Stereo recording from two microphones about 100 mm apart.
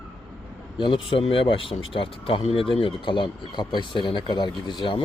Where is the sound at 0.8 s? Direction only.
60° left (ahead or behind).